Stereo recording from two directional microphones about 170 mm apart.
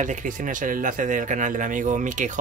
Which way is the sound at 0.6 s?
50° right (ahead or behind).